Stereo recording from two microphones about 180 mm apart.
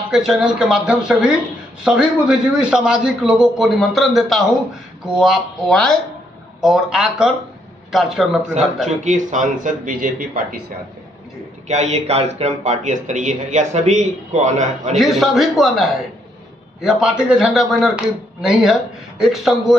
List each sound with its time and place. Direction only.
0.1 s a man's voice: 5° right (ahead or behind)
8.8 s a man's voice: 45° right (ahead or behind)
11.6 s speech: 40° right (ahead or behind)
15.0 s a man's voice: centre (ahead or behind)